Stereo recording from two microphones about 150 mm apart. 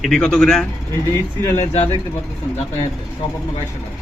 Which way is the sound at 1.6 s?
45° left (ahead or behind).